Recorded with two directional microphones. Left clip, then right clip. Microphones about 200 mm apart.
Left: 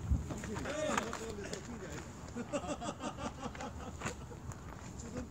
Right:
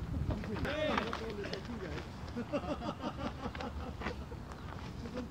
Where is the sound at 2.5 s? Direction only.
45° left (ahead or behind).